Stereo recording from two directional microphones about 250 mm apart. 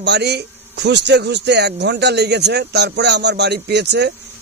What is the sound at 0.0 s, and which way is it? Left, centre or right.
Speech, right.